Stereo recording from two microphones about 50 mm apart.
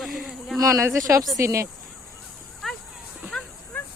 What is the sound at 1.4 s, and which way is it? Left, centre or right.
Speech, right.